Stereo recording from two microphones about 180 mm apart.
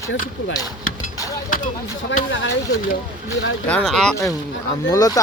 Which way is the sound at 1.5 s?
50° left (ahead or behind).